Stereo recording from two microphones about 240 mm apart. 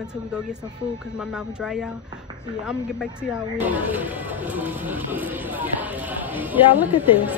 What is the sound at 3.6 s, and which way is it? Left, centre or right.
A woman's voice, centre.